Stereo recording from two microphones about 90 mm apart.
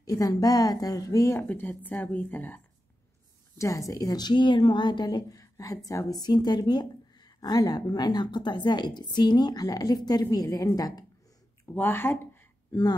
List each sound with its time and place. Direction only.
0.0 s a woman's voice: 40° left (ahead or behind)
1.5 s a woman's voice: 20° left (ahead or behind)
3.5 s a woman's voice: 35° left (ahead or behind); by 5.4 s 50° left (ahead or behind)
5.4 s a sound: 40° left (ahead or behind)
5.9 s a woman's voice: 40° left (ahead or behind)
11.6 s speech: 25° left (ahead or behind)